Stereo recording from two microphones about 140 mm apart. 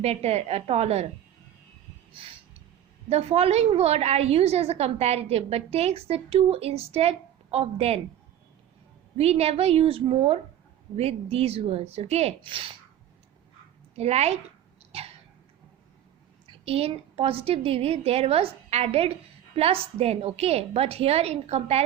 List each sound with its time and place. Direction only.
0.0 s a woman's voice: 45° right (ahead or behind)
3.1 s a woman's voice: 50° right (ahead or behind)
9.1 s a woman's voice: 50° right (ahead or behind)
13.9 s a woman's voice: 50° right (ahead or behind)
16.6 s a woman's voice: 45° right (ahead or behind)